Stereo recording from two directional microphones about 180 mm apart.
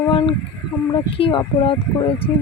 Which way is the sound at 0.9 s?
25° left (ahead or behind).